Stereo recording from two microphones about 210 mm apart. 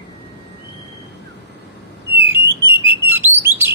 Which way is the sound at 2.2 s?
10° right (ahead or behind).